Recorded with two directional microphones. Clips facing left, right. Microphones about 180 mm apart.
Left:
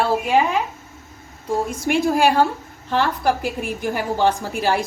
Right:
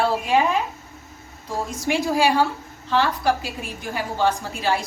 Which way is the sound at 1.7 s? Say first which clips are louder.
Left 1 dB; 55° left (ahead or behind).